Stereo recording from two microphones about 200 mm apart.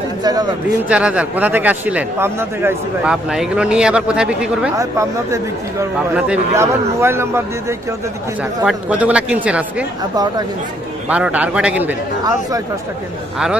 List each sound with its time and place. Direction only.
0.2 s a man's voice: 20° right (ahead or behind)
0.8 s a man's voice: 5° right (ahead or behind)
4.7 s speech: 15° right (ahead or behind)
8.6 s speech: 5° right (ahead or behind)
11.1 s speech: 5° right (ahead or behind)